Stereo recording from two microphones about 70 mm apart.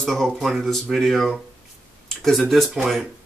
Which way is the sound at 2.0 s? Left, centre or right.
Centre.